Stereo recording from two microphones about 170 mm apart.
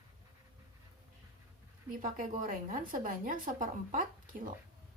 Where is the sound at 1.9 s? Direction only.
50° right (ahead or behind).